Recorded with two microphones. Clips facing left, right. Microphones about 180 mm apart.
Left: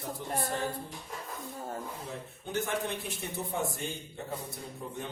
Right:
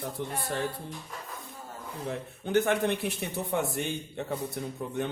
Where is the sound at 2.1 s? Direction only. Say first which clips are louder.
Right 7 dB; 65° right (ahead or behind).